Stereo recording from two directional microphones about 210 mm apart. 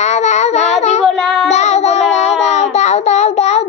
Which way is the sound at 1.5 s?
30° left (ahead or behind).